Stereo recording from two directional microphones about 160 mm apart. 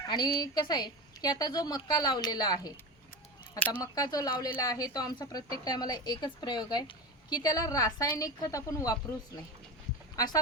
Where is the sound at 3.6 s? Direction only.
10° left (ahead or behind).